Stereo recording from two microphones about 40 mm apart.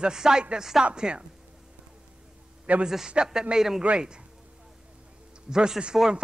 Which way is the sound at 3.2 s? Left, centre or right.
Right.